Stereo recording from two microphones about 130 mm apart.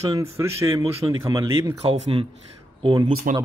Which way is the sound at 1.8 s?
50° right (ahead or behind).